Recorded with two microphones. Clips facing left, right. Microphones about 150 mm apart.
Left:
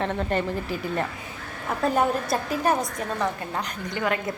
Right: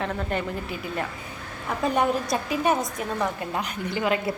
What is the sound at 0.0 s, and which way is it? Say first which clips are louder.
A woman's voice: left 2 dB; centre (ahead or behind).